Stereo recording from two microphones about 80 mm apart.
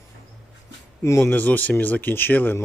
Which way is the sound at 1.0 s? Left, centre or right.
Left.